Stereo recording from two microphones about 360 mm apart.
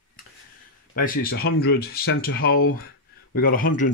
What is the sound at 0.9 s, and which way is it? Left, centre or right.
Speech, left.